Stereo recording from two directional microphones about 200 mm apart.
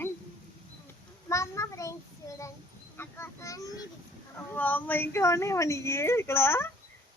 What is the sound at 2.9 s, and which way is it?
Speech, 10° left (ahead or behind).